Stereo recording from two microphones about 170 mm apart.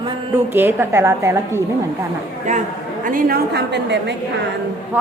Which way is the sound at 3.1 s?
55° right (ahead or behind).